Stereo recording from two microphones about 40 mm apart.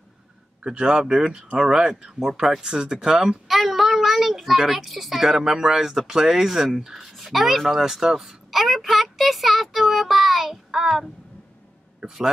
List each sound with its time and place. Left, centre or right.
0.7 s speech: right
3.4 s a child's voice: centre
7.1 s speech: centre
8.5 s a sound: centre
9.2 s child singing: centre
12.0 s a man's voice: right